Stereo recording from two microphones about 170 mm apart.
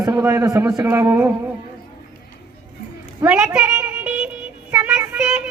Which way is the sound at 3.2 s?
10° right (ahead or behind).